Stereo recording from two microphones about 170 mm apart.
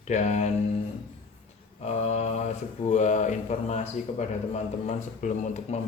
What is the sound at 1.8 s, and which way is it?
Mantra, 40° left (ahead or behind).